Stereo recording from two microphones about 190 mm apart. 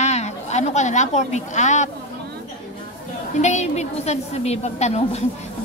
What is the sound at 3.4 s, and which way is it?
Speech, 35° left (ahead or behind).